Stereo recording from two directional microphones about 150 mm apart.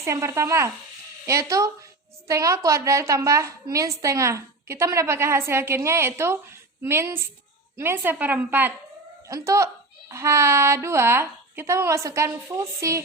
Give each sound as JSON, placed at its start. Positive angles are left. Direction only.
{"t": 0.0, "sound": "a woman's voice", "side_deg": -20}